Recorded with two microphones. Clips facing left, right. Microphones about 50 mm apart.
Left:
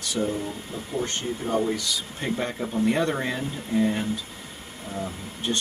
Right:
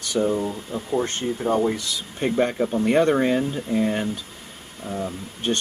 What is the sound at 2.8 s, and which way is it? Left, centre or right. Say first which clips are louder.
Speech: right 7 dB; right.